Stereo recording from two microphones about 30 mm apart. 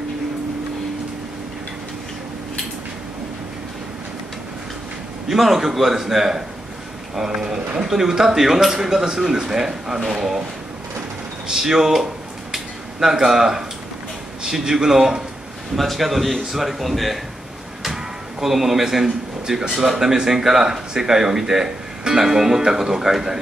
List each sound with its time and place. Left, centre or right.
5.3 s a man's voice: centre
11.5 s a man's voice: centre
15.7 s a man's voice: centre
17.8 s a sound: centre
20.0 s speech: centre